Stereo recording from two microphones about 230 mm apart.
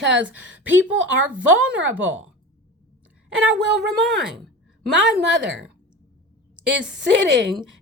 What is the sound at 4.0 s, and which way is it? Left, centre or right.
Speech, centre.